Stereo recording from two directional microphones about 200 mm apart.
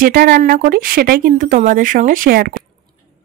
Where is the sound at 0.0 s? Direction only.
45° right (ahead or behind).